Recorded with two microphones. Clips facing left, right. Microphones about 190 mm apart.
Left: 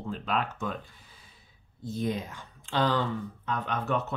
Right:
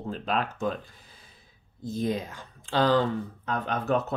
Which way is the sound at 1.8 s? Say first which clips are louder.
Right 2 dB; 35° right (ahead or behind).